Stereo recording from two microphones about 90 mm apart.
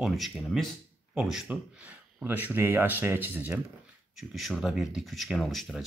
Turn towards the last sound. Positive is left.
turn(degrees=0)  # may be behind; listen again after turning